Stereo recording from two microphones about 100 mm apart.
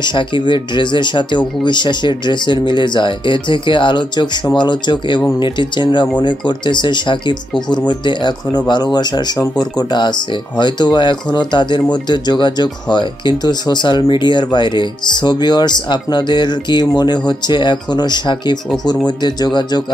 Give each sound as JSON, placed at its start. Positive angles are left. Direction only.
{"t": 0.0, "sound": "speech", "side_deg": 50}